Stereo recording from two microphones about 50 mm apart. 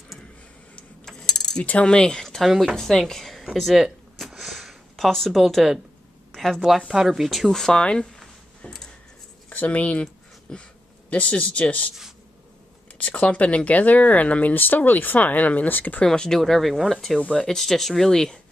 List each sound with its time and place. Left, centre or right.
1.0 s a sound: centre
1.6 s speech: left; by 3.8 s centre
4.3 s sniff: centre
5.4 s speech: centre
6.3 s a sound: centre
6.9 s speech: centre
7.4 s speech: centre
8.2 s a sound: centre
9.5 s speech: left
12.9 s speech: left
14.5 s speech: left
16.1 s speech: centre
17.3 s speech: centre